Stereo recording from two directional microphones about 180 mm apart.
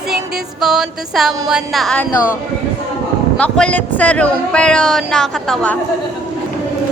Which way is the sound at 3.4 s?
5° left (ahead or behind).